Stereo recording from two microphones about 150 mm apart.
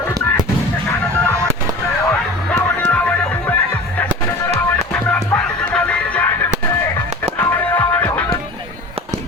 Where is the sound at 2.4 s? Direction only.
10° left (ahead or behind).